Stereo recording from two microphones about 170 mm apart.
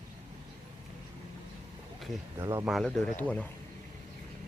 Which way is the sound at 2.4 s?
20° right (ahead or behind).